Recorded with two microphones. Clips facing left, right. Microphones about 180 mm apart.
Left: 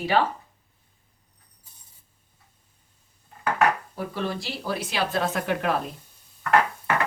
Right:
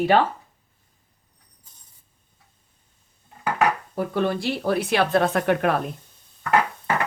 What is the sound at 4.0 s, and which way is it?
Speech, 55° right (ahead or behind).